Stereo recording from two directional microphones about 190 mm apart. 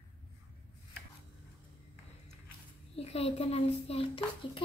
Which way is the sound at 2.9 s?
30° left (ahead or behind).